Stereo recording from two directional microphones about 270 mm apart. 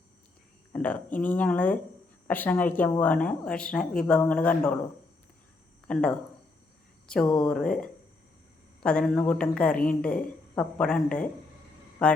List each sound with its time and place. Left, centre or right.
0.7 s speech: centre
5.9 s speech: centre